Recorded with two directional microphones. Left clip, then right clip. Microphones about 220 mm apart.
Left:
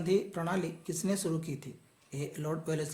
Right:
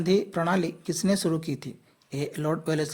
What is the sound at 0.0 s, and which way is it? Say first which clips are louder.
A woman's voice: right 6 dB; 35° right (ahead or behind).